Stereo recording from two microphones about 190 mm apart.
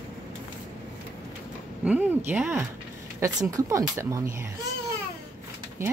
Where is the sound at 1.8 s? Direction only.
10° right (ahead or behind).